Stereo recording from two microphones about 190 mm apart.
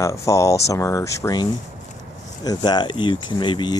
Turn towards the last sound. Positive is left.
turn(degrees=25)  # may be behind; listen again after turning